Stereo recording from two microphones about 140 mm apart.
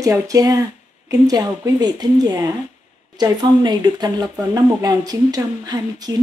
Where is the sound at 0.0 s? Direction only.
25° right (ahead or behind).